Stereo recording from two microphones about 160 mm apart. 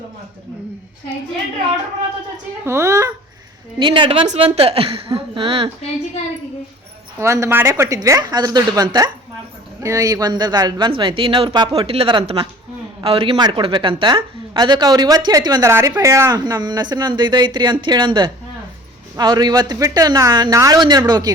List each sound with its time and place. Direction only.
2.6 s a woman's voice: 20° right (ahead or behind)
3.8 s a woman's voice: 30° right (ahead or behind)
7.2 s a woman's voice: 20° right (ahead or behind)